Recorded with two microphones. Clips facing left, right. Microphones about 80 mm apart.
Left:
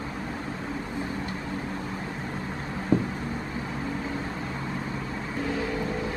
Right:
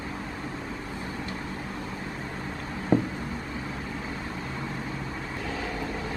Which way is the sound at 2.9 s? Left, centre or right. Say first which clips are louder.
Right 1 dB; right.